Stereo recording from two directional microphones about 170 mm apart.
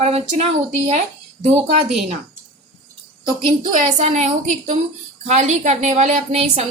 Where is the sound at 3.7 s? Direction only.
45° right (ahead or behind).